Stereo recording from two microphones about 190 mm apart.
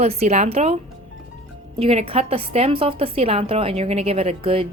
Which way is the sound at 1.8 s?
30° right (ahead or behind).